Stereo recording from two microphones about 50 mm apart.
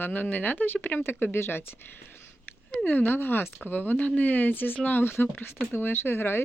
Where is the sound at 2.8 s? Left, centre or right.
Left.